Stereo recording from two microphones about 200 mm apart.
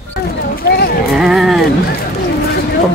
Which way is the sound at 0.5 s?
50° left (ahead or behind).